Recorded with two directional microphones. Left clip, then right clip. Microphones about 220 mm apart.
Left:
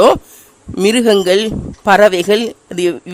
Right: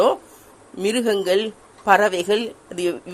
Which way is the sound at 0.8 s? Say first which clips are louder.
Left 9 dB; 45° left (ahead or behind).